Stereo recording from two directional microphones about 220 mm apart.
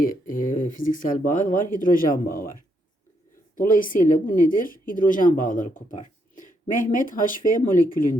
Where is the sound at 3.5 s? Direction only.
40° left (ahead or behind).